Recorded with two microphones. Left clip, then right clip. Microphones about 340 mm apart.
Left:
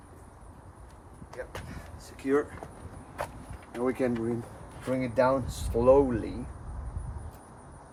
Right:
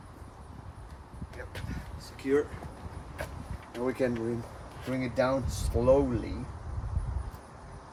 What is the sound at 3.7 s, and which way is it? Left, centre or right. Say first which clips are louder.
Speech: left 1 dB; centre.